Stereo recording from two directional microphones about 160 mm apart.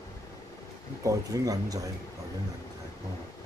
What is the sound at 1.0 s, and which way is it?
Speech, 20° right (ahead or behind).